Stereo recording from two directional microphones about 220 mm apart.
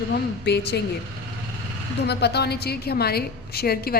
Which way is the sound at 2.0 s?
50° left (ahead or behind).